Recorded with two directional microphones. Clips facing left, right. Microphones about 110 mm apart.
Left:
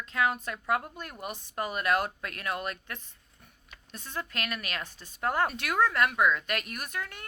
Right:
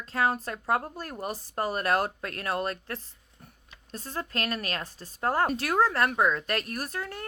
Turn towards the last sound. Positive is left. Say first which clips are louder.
# right 4 dB
turn(degrees=-35)  # may be behind; listen again after turning